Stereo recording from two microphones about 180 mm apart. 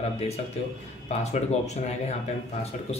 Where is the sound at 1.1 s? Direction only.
40° left (ahead or behind).